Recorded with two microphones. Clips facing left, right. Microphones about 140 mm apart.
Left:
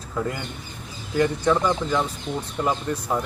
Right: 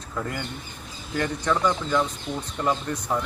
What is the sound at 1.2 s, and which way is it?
Speech, 10° left (ahead or behind).